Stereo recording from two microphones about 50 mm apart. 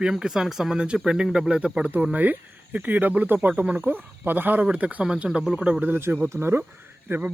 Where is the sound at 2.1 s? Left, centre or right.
Right.